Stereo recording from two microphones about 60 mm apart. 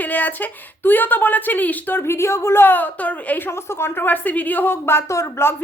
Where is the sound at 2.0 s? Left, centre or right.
Left.